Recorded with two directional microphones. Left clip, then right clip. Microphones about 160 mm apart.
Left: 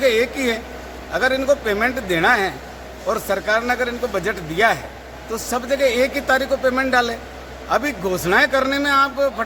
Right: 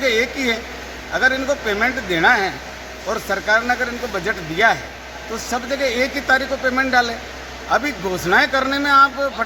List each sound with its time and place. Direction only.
0.0 s speech: 30° left (ahead or behind)